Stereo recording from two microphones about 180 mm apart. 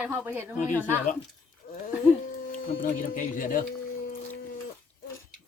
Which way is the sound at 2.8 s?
50° left (ahead or behind).